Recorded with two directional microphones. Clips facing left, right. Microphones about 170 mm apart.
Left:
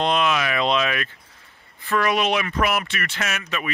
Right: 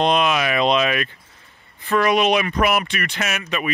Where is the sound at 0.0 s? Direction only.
15° right (ahead or behind).